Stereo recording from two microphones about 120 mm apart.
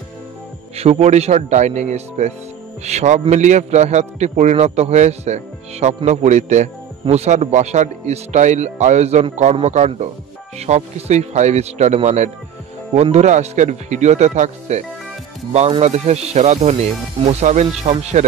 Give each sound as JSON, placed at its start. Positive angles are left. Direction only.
{"t": 0.7, "sound": "speech", "side_deg": -65}
{"t": 15.5, "sound": "speech", "side_deg": -65}